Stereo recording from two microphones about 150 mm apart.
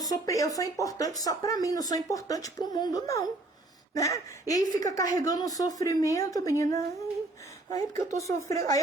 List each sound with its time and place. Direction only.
0.0 s speech: 25° left (ahead or behind)